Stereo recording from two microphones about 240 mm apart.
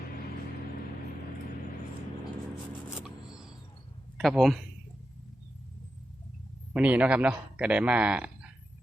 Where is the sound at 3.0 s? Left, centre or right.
Centre.